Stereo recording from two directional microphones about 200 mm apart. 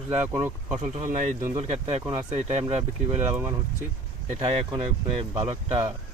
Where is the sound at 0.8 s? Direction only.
35° right (ahead or behind).